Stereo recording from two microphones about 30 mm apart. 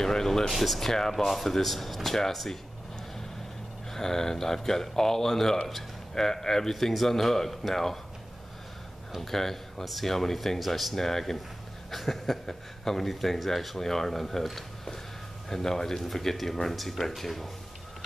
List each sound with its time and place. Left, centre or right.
0.0 s speech: centre
0.5 s speech: centre
1.2 s speech: centre
3.9 s speech: centre
6.7 s speech: centre
9.2 s speech: centre
11.0 s speech: centre